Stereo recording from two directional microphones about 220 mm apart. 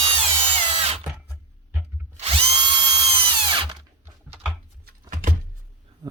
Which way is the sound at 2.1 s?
25° right (ahead or behind).